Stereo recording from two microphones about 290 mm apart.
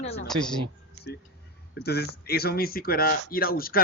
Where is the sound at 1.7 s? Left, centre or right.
Left.